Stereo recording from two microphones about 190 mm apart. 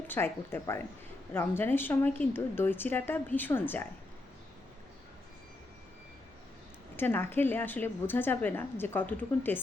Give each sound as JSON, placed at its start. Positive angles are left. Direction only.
{"t": 0.1, "sound": "a woman's voice", "side_deg": 10}
{"t": 6.9, "sound": "a woman's voice", "side_deg": 10}